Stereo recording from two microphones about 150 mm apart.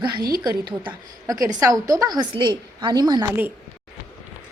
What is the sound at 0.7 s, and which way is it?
A woman's voice, 30° right (ahead or behind).